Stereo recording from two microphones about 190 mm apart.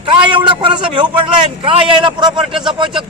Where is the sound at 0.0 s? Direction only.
25° right (ahead or behind).